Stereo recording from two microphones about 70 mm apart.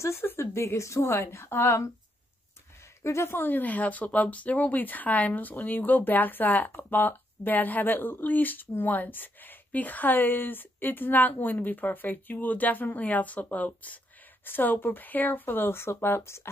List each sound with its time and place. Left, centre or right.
0.0 s a woman's voice: left
3.0 s speech: left